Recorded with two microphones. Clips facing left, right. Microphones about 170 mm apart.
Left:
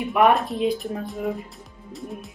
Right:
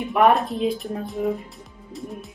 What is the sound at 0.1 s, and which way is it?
Speech, centre (ahead or behind).